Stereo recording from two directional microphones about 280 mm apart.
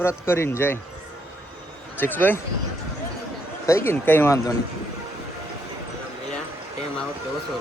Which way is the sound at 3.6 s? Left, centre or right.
Centre.